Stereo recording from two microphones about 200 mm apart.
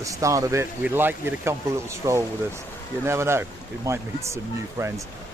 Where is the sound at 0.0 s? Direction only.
15° right (ahead or behind).